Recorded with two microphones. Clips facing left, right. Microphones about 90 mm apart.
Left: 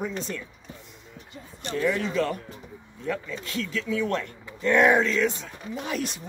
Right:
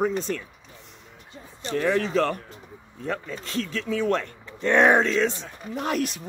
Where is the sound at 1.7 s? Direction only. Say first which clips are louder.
Right 3 dB; 50° right (ahead or behind).